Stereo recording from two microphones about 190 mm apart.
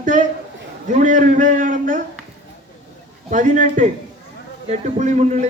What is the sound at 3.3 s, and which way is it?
A man's voice, 40° right (ahead or behind).